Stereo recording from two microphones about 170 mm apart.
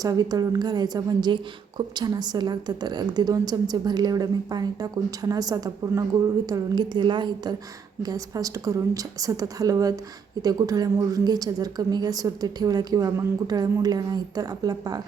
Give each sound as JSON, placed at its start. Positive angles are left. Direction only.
{"t": 0.0, "sound": "a woman's voice", "side_deg": -20}